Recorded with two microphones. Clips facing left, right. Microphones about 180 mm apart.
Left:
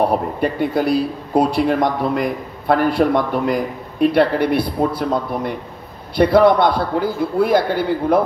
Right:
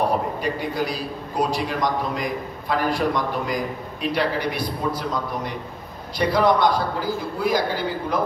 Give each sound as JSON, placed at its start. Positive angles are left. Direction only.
{"t": 0.4, "sound": "a man's voice", "side_deg": 60}